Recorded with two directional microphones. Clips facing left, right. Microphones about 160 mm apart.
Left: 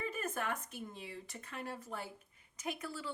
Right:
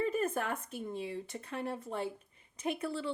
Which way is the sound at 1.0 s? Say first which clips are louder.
Right 8 dB; 25° right (ahead or behind).